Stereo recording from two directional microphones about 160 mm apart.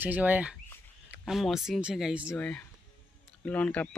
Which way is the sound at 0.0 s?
10° right (ahead or behind).